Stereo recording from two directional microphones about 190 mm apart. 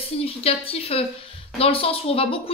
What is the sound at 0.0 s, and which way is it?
A woman's voice, 30° left (ahead or behind).